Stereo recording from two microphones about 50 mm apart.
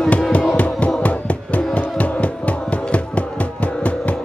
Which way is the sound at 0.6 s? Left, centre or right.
Left.